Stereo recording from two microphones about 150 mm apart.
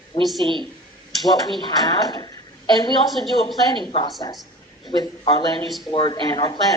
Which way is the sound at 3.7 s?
30° left (ahead or behind).